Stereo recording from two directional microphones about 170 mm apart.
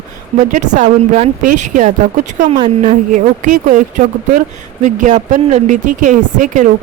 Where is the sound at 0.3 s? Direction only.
45° right (ahead or behind).